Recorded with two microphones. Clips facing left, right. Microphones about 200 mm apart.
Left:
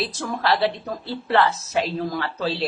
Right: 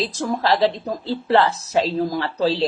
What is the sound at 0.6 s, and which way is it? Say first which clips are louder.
Speech: right 4 dB; 15° right (ahead or behind).